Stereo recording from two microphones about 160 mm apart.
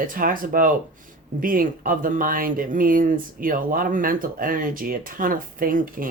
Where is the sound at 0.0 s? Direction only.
60° right (ahead or behind).